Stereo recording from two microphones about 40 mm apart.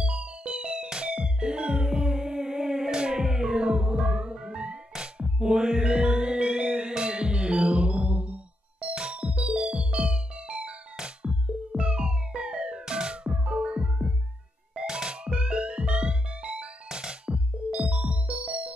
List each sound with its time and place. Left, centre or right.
0.0 s music: right